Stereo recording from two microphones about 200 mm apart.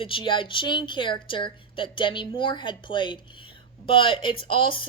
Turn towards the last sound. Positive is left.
turn(degrees=25)  # may be behind; listen again after turning